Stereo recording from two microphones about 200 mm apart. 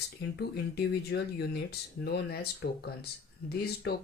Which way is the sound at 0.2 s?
55° left (ahead or behind).